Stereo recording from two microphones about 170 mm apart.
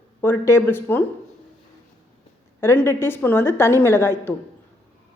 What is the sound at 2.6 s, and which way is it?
A woman's voice, 15° left (ahead or behind).